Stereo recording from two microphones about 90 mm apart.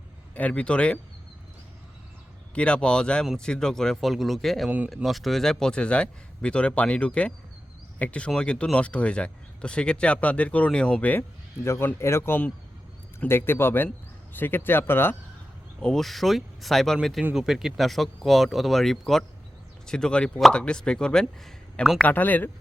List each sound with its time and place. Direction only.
0.3 s speech: 15° left (ahead or behind)
2.6 s a man's voice: 10° left (ahead or behind)
15.8 s speech: 5° left (ahead or behind)
22.0 s a man's voice: 20° left (ahead or behind)